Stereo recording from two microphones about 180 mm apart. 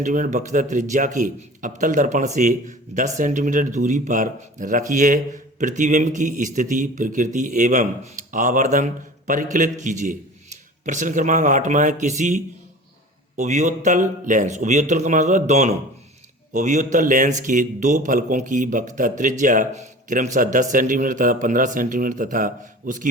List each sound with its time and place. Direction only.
0.0 s a man's voice: 45° right (ahead or behind)